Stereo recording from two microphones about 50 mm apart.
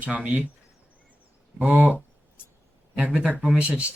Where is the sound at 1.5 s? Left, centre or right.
Right.